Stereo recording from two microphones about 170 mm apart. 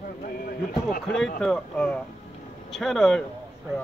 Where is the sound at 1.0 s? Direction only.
Centre (ahead or behind).